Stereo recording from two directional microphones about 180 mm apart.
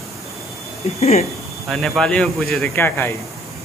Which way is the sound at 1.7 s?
5° left (ahead or behind).